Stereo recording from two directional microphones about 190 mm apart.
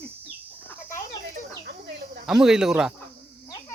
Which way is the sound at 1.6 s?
50° right (ahead or behind).